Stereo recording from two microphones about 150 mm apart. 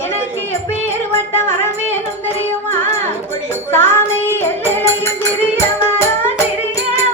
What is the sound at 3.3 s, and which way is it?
Music, 15° left (ahead or behind).